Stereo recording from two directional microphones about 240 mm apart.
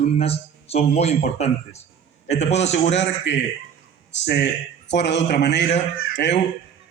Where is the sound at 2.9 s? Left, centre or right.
Left.